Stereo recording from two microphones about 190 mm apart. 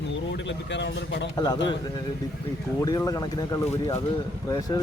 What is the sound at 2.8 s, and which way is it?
Speech, 20° left (ahead or behind).